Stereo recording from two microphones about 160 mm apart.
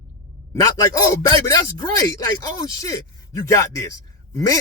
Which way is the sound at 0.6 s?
20° left (ahead or behind).